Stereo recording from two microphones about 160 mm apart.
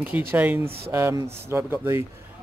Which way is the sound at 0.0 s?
10° right (ahead or behind).